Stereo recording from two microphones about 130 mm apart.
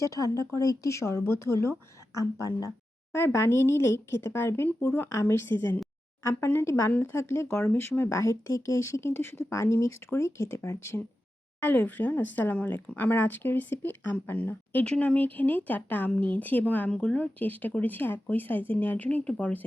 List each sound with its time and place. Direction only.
0.0 s speech: 25° left (ahead or behind)
2.6 s speech: 20° left (ahead or behind)